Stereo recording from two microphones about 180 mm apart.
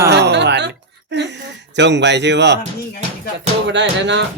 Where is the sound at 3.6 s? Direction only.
80° right.